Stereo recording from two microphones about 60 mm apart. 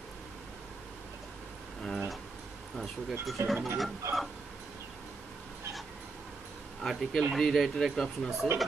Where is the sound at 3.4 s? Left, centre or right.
Right.